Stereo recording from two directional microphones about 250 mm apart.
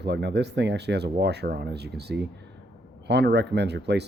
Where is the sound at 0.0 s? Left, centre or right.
Right.